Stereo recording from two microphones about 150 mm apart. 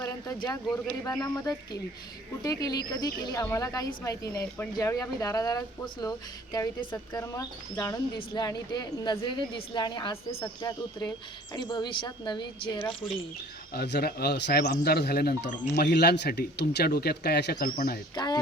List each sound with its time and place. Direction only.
1.0 s speech: 25° left (ahead or behind)
13.7 s a man's voice: 90° left; by 18.0 s 75° left (ahead or behind)
18.1 s speech: 30° left (ahead or behind)